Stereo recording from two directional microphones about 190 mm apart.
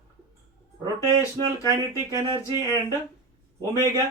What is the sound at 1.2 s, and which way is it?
Speech, 15° left (ahead or behind).